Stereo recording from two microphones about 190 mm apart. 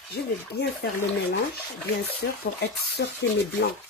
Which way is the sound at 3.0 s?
60° left (ahead or behind).